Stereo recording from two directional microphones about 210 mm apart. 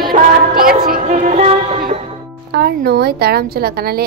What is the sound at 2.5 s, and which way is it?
A woman's voice, 50° right (ahead or behind).